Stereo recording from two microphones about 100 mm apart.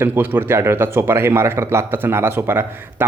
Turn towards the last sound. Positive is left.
turn(degrees=-25)  # may be behind; listen again after turning